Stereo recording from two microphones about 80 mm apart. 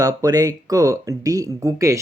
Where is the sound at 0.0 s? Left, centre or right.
Right.